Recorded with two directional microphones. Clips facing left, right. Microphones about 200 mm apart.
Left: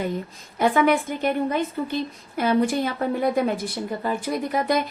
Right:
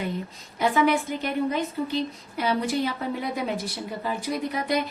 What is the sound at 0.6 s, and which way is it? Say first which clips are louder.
Speech: left 3 dB; 50° left (ahead or behind).